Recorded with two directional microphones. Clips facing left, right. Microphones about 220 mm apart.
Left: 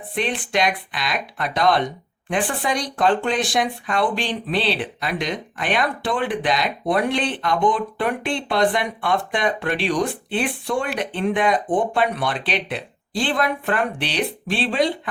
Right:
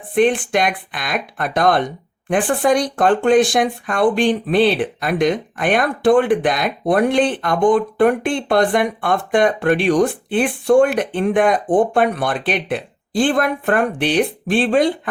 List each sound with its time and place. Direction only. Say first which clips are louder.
0.1 s speech: right 9 dB; 50° right (ahead or behind)